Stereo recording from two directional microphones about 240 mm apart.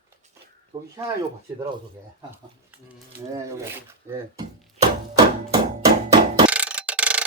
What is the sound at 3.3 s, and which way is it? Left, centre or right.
Speech, centre.